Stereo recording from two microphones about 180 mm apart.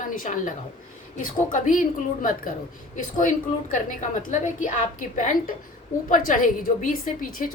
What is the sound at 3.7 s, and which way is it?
A woman's voice, 40° left (ahead or behind).